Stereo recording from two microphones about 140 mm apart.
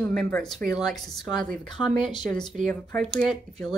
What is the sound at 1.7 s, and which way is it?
Speech, 35° left (ahead or behind).